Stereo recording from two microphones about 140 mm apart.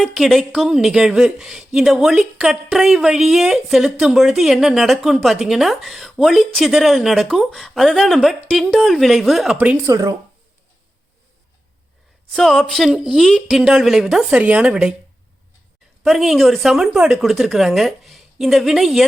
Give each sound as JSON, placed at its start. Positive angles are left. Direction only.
{"t": 0.0, "sound": "a woman's voice", "side_deg": 0}
{"t": 9.8, "sound": "speech", "side_deg": -25}
{"t": 12.3, "sound": "a woman's voice", "side_deg": 0}
{"t": 16.0, "sound": "a woman's voice", "side_deg": 0}